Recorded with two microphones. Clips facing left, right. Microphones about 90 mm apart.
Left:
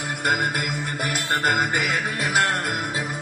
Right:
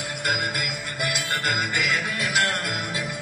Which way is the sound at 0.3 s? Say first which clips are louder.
Left 4 dB; 35° left (ahead or behind).